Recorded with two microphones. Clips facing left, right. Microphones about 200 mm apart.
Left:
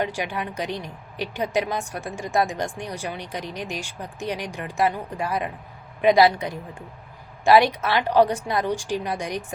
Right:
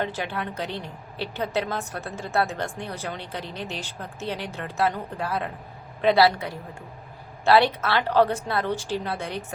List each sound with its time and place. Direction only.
0.0 s a woman's voice: 15° left (ahead or behind)